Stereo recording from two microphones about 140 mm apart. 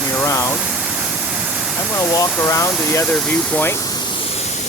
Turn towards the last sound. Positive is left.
turn(degrees=20)  # may be behind; listen again after turning